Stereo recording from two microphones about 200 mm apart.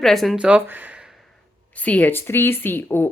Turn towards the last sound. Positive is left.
turn(degrees=10)  # may be behind; listen again after turning